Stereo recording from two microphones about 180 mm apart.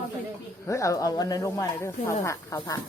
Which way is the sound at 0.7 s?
20° left (ahead or behind).